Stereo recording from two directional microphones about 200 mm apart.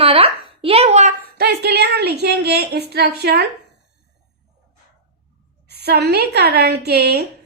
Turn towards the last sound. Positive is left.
turn(degrees=-55)  # may be behind; listen again after turning